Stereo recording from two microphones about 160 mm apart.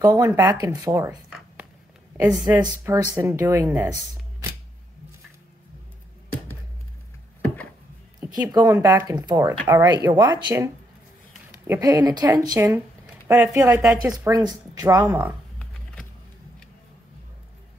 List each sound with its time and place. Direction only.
0.0 s speech: 15° right (ahead or behind)
2.3 s speech: 25° right (ahead or behind)
8.2 s speech: 25° right (ahead or behind)
11.8 s speech: 25° right (ahead or behind)